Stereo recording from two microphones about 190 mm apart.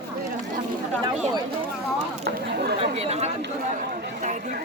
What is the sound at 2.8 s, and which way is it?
Speech, 35° right (ahead or behind).